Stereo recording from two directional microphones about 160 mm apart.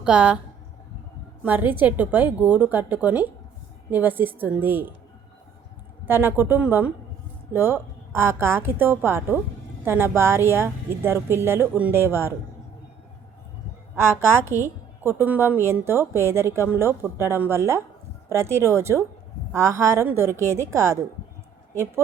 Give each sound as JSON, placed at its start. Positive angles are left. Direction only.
{"t": 0.0, "sound": "a woman's voice", "side_deg": -5}
{"t": 1.5, "sound": "a woman's voice", "side_deg": -10}
{"t": 6.1, "sound": "a woman's voice", "side_deg": -15}
{"t": 14.3, "sound": "a woman's voice", "side_deg": -15}